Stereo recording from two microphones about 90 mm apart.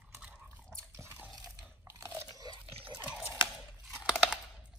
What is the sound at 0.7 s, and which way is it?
Drip, 30° right (ahead or behind).